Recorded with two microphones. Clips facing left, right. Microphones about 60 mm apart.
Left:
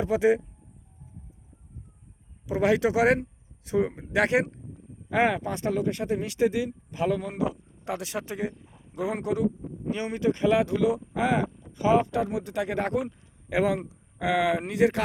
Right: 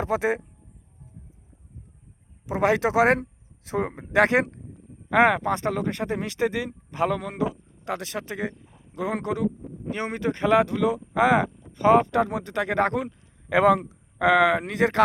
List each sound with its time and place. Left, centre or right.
0.0 s speech: right
2.5 s speech: right
5.1 s speech: right
5.4 s speech: right
7.2 s a man's voice: right
7.5 s a sound: centre
7.9 s speech: right
8.3 s speech: right
8.5 s a sound: centre
9.9 s speech: right
11.1 s speech: right
11.7 s speech: right
13.1 s a sound: centre
13.5 s speech: right